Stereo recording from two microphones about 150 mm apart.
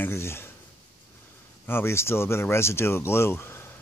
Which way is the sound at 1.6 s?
15° left (ahead or behind).